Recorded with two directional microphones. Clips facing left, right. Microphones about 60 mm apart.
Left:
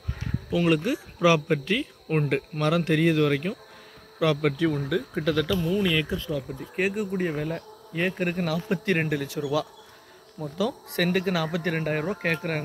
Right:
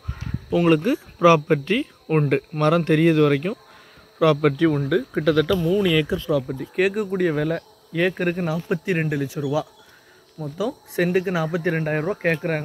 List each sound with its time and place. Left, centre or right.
0.5 s speech: right
8.1 s speech: right
9.4 s speech: centre
10.6 s speech: centre